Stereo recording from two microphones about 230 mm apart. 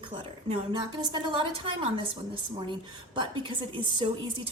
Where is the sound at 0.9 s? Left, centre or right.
Centre.